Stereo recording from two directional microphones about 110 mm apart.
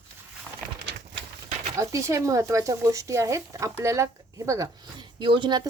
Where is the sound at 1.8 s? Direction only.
30° right (ahead or behind).